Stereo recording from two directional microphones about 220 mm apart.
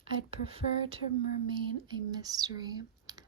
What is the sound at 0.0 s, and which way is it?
Speech, 25° right (ahead or behind).